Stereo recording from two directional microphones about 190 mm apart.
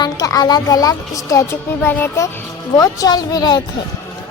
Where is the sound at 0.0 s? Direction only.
20° left (ahead or behind).